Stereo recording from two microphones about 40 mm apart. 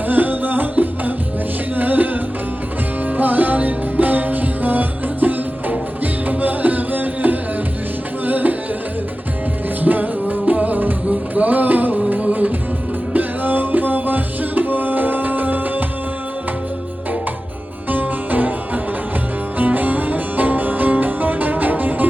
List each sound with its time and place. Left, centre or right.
0.1 s music: right
9.8 s music: right
17.8 s music: right